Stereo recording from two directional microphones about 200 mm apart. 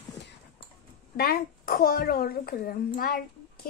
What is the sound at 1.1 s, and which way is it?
Speech, 45° left (ahead or behind).